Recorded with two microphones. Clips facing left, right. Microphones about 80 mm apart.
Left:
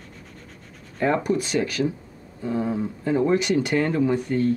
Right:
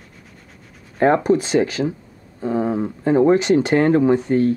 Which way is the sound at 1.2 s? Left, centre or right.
Right.